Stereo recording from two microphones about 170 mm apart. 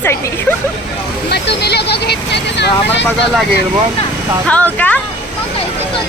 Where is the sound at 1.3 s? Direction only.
75° left (ahead or behind).